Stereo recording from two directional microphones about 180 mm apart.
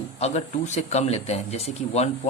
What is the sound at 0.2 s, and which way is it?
Speech, 35° left (ahead or behind).